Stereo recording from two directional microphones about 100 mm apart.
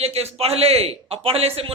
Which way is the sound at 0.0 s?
90° right.